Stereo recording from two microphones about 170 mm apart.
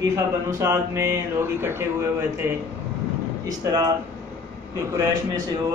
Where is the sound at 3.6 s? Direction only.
20° right (ahead or behind).